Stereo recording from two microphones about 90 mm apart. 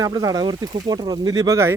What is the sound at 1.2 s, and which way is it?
Speech, 45° right (ahead or behind).